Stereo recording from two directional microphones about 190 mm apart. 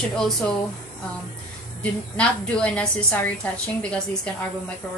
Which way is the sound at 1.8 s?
5° left (ahead or behind).